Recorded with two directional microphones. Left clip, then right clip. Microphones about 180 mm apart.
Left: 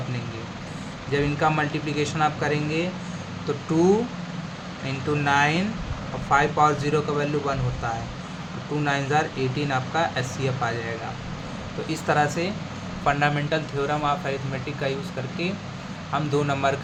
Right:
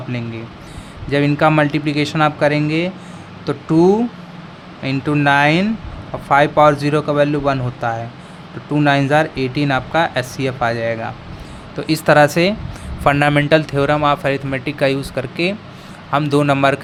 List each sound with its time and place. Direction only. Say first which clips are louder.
1.1 s speech: right 9 dB; 60° right (ahead or behind)
11.9 s speech: right 11 dB; 65° right (ahead or behind)
16.1 s speech: right 9 dB; 65° right (ahead or behind)